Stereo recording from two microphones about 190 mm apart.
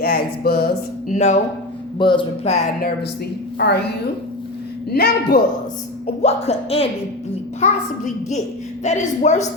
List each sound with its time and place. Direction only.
0.0 s speech: 50° left (ahead or behind)
1.1 s a child's voice: 35° left (ahead or behind)
2.0 s speech: 25° left (ahead or behind)
3.6 s a woman's voice: 60° left (ahead or behind)
4.9 s a woman's voice: 55° left (ahead or behind)
6.2 s a child's voice: 35° left (ahead or behind)